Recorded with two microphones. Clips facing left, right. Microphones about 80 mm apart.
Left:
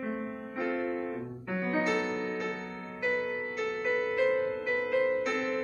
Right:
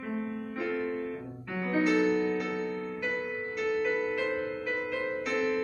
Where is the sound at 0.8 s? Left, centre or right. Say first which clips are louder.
Left 1 dB; left.